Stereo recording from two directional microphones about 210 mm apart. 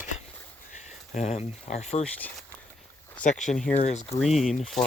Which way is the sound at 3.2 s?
35° left (ahead or behind).